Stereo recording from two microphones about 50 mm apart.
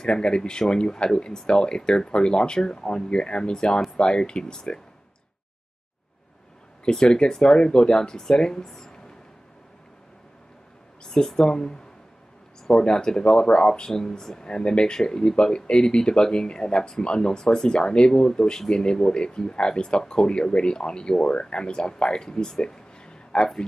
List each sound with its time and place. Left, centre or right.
0.0 s speech: centre
6.8 s speech: centre
11.1 s speech: centre
12.8 s speech: centre